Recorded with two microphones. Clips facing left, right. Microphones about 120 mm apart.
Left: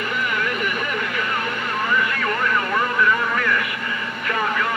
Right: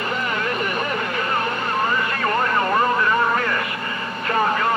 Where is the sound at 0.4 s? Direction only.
35° right (ahead or behind).